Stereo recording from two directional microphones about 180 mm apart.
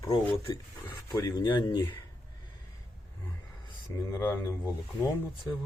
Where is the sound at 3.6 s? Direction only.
20° left (ahead or behind).